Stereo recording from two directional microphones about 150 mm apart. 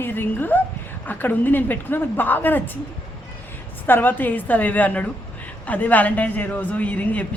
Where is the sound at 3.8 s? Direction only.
15° left (ahead or behind).